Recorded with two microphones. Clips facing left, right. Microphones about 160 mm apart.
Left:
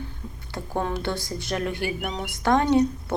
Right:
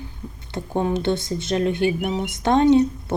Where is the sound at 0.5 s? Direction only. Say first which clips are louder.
Right 5 dB; 20° right (ahead or behind).